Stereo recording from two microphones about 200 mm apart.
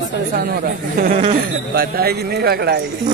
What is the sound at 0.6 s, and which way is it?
Speech, 45° right (ahead or behind).